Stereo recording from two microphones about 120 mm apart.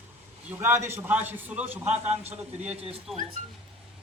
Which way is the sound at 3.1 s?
Centre (ahead or behind).